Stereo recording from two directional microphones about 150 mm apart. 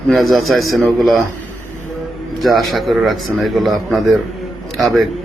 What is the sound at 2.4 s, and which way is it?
A man's voice, centre (ahead or behind).